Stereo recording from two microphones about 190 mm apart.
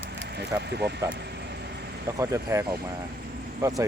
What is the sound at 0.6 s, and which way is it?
Speech, 60° right (ahead or behind).